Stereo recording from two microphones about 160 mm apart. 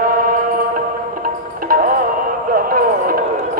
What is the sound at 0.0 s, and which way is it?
Music, 60° right (ahead or behind).